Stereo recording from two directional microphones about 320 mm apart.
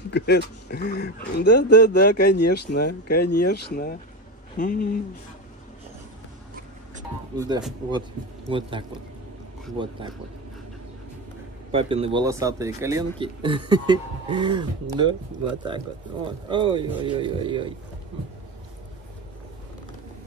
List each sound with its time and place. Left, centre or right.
0.1 s speech: left
7.3 s speech: centre
11.7 s speech: centre